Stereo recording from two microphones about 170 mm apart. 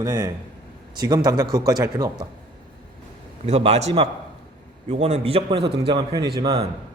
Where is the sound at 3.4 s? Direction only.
40° right (ahead or behind).